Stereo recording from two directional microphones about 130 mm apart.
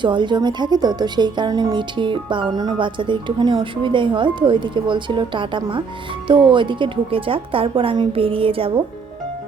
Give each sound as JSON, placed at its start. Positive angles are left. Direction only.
{"t": 0.0, "sound": "speech", "side_deg": -35}